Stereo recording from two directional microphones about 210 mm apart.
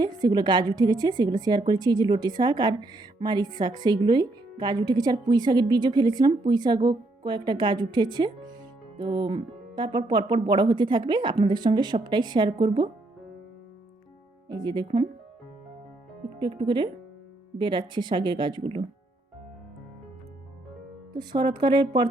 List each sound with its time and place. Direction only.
0.0 s a woman's voice: 20° right (ahead or behind)
14.5 s a woman's voice: 20° right (ahead or behind)
16.4 s a woman's voice: 20° right (ahead or behind)
21.1 s a woman's voice: 20° right (ahead or behind)